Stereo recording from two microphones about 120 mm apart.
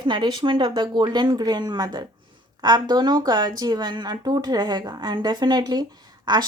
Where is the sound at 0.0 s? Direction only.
40° right (ahead or behind).